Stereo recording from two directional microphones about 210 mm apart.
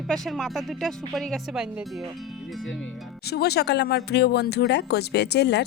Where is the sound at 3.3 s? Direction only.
50° left (ahead or behind).